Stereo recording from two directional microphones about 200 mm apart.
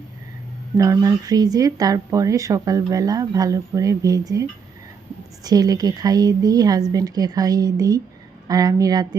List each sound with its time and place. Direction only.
0.8 s a woman's voice: 15° right (ahead or behind)